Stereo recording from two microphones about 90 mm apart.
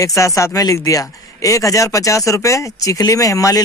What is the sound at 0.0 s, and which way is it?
Speech, 35° left (ahead or behind).